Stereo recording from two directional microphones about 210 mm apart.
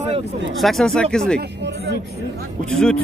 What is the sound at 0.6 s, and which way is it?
Speech, centre (ahead or behind).